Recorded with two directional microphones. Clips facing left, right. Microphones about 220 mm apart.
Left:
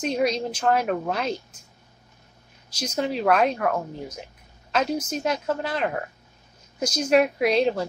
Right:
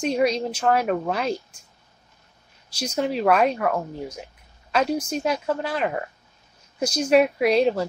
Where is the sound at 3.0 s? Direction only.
Centre (ahead or behind).